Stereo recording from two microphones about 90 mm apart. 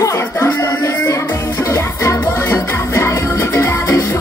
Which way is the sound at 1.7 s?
30° left (ahead or behind).